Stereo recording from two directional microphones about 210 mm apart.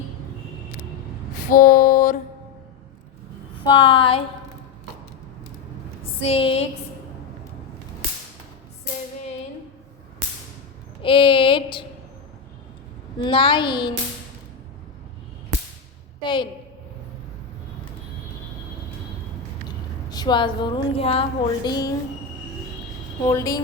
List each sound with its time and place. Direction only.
1.5 s a sound: 40° left (ahead or behind)
3.6 s a woman's voice: 25° left (ahead or behind)
6.0 s a sound: 25° left (ahead or behind)
11.0 s a woman's voice: 25° left (ahead or behind)
13.1 s a woman's voice: 25° left (ahead or behind)
16.2 s a woman's voice: 20° left (ahead or behind)
19.6 s a woman's voice: 20° left (ahead or behind)
23.3 s speech: 15° left (ahead or behind)